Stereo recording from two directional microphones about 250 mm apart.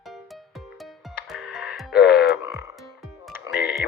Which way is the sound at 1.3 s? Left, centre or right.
Centre.